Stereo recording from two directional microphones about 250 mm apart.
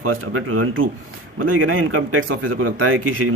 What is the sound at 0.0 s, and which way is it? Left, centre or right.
A man's voice, right.